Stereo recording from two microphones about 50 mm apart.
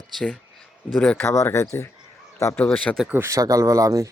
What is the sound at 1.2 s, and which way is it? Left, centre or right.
Speech, left.